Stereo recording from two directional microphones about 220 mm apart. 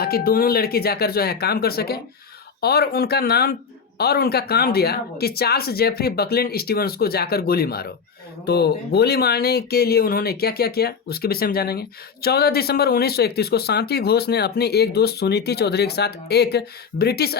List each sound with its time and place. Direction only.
0.0 s speech: 45° left (ahead or behind)